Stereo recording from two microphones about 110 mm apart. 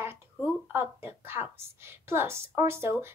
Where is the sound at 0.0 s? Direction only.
20° right (ahead or behind).